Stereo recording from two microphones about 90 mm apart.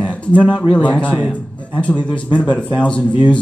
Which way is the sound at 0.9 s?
15° left (ahead or behind).